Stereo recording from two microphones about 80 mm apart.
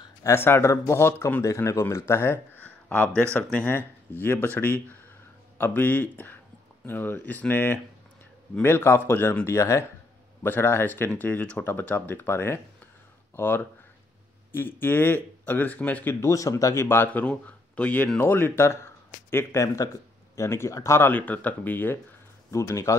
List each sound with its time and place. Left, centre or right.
0.4 s speech: left
2.6 s a sound: left
4.2 s speech: left
9.5 s speech: left
16.8 s speech: left
19.3 s speech: left
21.0 s speech: left
22.5 s speech: left